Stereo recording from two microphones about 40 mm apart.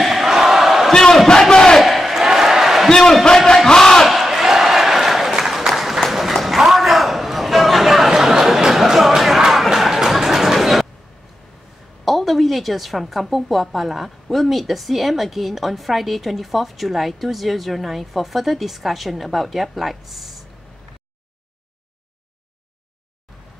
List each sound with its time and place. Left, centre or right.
0.0 s battle cry: centre
1.5 s crowd: centre
1.8 s crowd: centre
2.9 s battle cry: centre
4.0 s battle cry: centre
5.7 s applause: centre
6.4 s a sound: centre
12.0 s a woman's voice: centre